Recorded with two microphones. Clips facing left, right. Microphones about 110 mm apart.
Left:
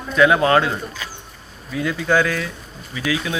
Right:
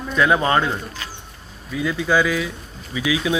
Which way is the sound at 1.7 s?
Centre (ahead or behind).